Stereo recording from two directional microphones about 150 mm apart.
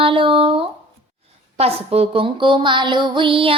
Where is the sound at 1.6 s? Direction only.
40° right (ahead or behind).